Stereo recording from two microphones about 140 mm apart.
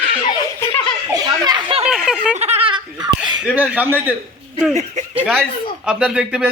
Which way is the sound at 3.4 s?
10° right (ahead or behind).